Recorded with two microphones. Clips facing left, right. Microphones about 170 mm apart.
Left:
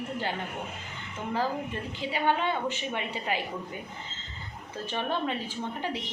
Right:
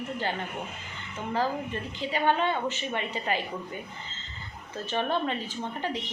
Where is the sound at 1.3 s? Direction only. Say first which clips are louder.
Right 1 dB; 10° left (ahead or behind).